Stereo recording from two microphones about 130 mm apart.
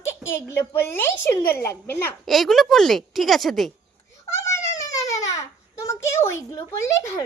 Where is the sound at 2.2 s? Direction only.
Centre (ahead or behind).